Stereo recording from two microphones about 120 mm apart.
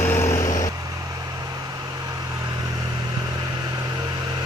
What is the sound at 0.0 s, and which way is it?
Vehicle, 20° left (ahead or behind).